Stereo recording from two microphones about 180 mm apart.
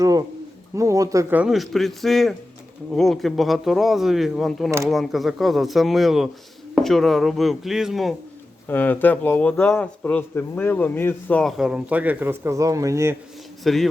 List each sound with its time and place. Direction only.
0.0 s speech: 20° right (ahead or behind); by 8.1 s centre (ahead or behind)
8.6 s speech: 10° left (ahead or behind); by 13.1 s 15° right (ahead or behind)
13.7 s speech: centre (ahead or behind)